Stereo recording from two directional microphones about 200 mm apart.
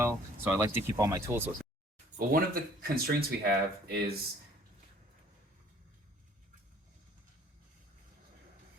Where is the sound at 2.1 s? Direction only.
45° right (ahead or behind).